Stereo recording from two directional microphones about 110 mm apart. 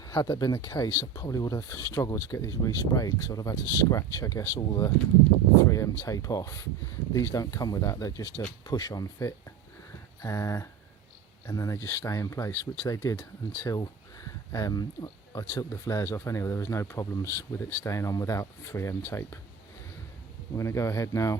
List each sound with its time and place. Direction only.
0.0 s speech: 30° left (ahead or behind)
13.7 s speech: 35° left (ahead or behind)
20.6 s speech: 25° left (ahead or behind)